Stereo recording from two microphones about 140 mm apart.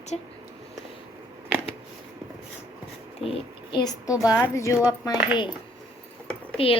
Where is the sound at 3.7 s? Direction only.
30° left (ahead or behind).